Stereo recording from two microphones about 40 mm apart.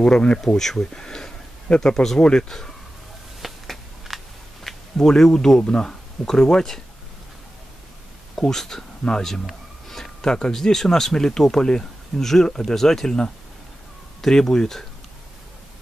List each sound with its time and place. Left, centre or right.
0.1 s speech: left
0.6 s speech: centre
3.3 s a sound: centre
4.9 s speech: centre
8.4 s speech: centre
9.2 s a sound: centre
10.5 s speech: centre